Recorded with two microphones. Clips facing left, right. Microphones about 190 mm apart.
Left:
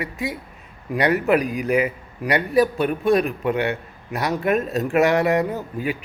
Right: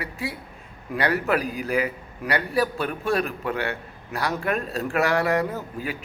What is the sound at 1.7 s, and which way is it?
A man's voice, 15° left (ahead or behind).